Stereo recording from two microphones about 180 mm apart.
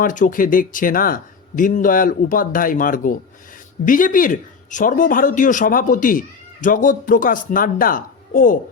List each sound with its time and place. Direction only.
0.0 s speech: 45° left (ahead or behind)